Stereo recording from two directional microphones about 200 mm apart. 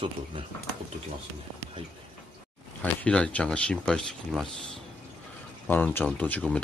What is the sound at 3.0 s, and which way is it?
Speech, 5° left (ahead or behind).